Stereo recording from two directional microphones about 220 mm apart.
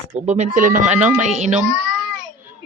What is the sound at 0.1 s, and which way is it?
Speech, 30° right (ahead or behind).